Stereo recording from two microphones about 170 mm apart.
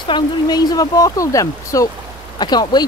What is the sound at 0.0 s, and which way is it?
Speech, 25° left (ahead or behind).